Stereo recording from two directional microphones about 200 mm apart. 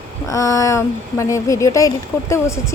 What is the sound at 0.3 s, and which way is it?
Speech, 15° left (ahead or behind).